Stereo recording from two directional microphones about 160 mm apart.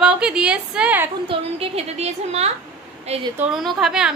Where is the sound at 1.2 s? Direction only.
40° right (ahead or behind).